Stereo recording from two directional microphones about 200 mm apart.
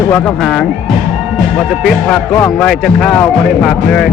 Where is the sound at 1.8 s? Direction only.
5° left (ahead or behind).